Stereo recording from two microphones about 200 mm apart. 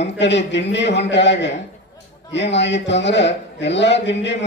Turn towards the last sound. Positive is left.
turn(degrees=60)  # may be behind; listen again after turning